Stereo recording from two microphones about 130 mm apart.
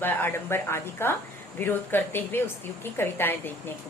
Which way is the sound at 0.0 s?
15° left (ahead or behind).